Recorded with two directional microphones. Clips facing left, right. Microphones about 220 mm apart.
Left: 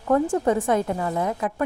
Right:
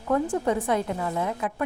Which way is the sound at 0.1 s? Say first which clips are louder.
Left 4 dB; 45° left (ahead or behind).